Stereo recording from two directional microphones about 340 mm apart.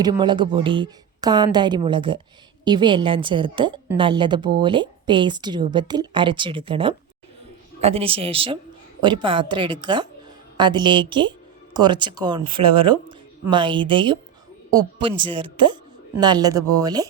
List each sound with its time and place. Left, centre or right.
0.0 s a woman's voice: centre